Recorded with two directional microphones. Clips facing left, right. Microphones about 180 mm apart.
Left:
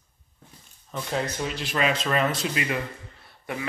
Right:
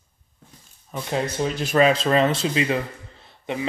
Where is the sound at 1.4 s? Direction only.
45° right (ahead or behind).